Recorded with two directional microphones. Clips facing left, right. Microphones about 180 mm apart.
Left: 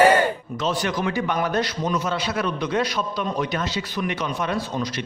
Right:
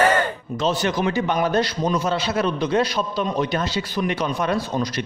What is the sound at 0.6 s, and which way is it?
A man's voice, 25° right (ahead or behind).